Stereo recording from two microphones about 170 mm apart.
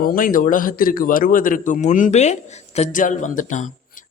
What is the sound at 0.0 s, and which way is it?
A man's voice, 55° left (ahead or behind).